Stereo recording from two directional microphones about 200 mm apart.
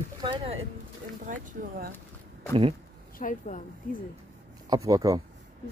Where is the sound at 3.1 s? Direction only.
40° left (ahead or behind).